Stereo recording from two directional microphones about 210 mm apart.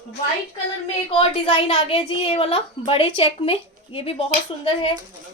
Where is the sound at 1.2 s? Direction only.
25° left (ahead or behind).